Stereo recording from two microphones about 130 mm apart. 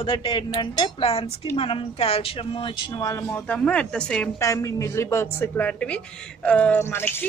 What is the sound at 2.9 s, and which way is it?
Speech, 25° left (ahead or behind).